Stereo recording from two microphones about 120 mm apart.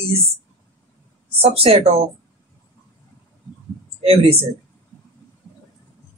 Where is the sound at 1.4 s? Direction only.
55° right (ahead or behind).